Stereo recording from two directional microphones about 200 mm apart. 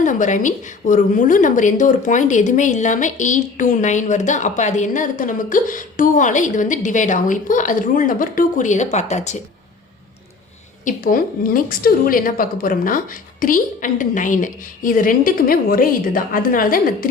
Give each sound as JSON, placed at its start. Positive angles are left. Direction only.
{"t": 0.0, "sound": "a woman's voice", "side_deg": 40}
{"t": 10.8, "sound": "a woman's voice", "side_deg": 45}